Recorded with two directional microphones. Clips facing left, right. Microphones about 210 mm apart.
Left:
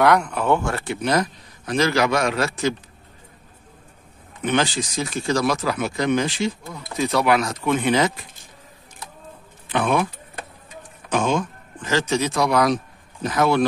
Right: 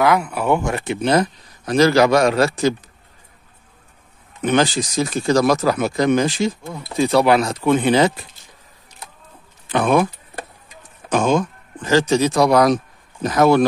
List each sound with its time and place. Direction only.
0.0 s speech: 5° right (ahead or behind); by 2.7 s 35° right (ahead or behind)
4.4 s speech: 40° right (ahead or behind)
6.6 s speech: 30° right (ahead or behind)
9.7 s vehicle: 40° right (ahead or behind)
11.1 s speech: 40° right (ahead or behind)